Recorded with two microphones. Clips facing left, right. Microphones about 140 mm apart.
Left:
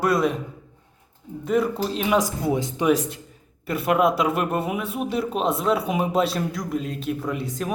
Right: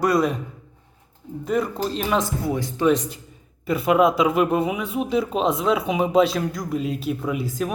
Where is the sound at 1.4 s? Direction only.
Centre (ahead or behind).